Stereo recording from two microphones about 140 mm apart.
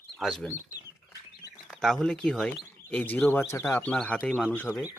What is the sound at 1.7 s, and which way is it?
Speech, centre (ahead or behind).